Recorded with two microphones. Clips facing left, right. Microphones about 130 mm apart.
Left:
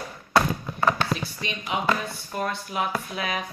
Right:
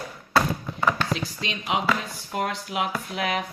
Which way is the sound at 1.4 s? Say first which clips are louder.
Right 2 dB; 90° right.